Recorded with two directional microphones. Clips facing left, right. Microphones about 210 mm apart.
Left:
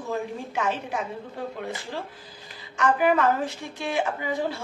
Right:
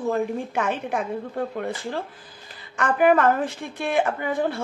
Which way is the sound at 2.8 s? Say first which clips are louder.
Right 3 dB; 55° right (ahead or behind).